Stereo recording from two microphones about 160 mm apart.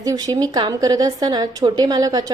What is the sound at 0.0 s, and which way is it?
A woman's voice, 20° right (ahead or behind).